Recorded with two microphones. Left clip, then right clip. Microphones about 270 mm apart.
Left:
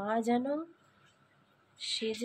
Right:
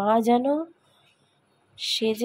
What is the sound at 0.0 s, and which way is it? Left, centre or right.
Speech, right.